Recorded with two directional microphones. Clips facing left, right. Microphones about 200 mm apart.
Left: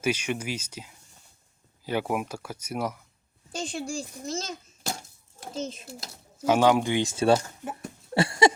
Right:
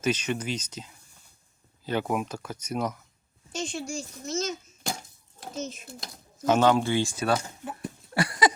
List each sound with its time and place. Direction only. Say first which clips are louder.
0.0 s speech: even; 10° left (ahead or behind)
3.5 s a child's voice: left 1 dB; 35° left (ahead or behind)
5.5 s a child's voice: left 2 dB; 30° left (ahead or behind)
6.0 s speech: left 1 dB; 10° left (ahead or behind); by 7.3 s 25° left (ahead or behind)
7.6 s a sound: left 1 dB; 5° left (ahead or behind)
8.1 s a sound: left 4 dB; 25° left (ahead or behind)